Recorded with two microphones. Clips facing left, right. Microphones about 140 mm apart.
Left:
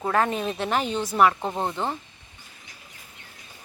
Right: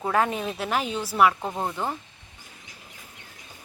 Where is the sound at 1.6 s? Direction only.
20° left (ahead or behind).